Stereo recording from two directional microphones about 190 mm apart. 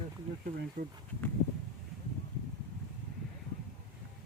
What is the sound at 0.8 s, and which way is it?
Speech, 45° right (ahead or behind).